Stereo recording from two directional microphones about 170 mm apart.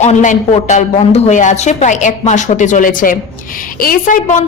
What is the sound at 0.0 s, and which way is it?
A woman's voice, 45° left (ahead or behind).